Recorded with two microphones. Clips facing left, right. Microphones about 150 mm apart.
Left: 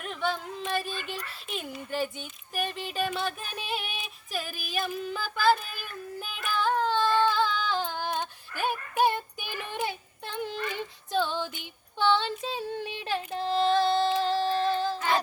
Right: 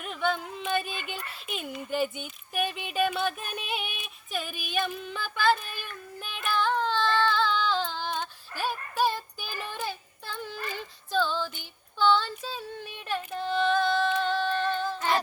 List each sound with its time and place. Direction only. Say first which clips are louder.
0.0 s carnatic music: right 2 dB; centre (ahead or behind)
1.0 s a sound: even; 5° right (ahead or behind)
3.7 s female singing: even; centre (ahead or behind); by 8.3 s 15° left (ahead or behind)
8.6 s child singing: left 2 dB; 15° left (ahead or behind)
11.1 s female singing: right 1 dB; 20° left (ahead or behind)
11.9 s child singing: right 1 dB; 20° left (ahead or behind)
12.8 s child singing: left 6 dB; 90° left
13.1 s female singing: even; 30° left (ahead or behind)